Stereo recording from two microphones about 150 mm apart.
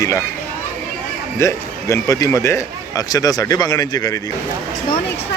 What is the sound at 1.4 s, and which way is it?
Speech, 20° left (ahead or behind).